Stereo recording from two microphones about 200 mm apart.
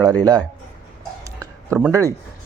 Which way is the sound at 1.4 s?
15° right (ahead or behind).